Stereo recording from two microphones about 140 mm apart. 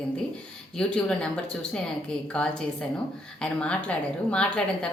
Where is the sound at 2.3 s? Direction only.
5° left (ahead or behind).